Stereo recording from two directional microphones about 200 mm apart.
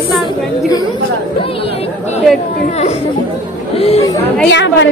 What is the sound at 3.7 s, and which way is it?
Speech, 30° left (ahead or behind).